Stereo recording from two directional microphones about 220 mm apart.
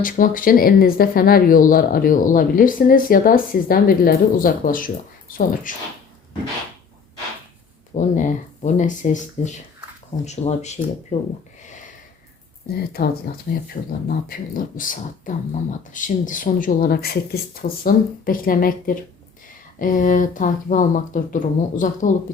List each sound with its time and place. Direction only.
0.0 s speech: 40° left (ahead or behind)
7.9 s speech: 35° left (ahead or behind)
12.7 s speech: 45° left (ahead or behind)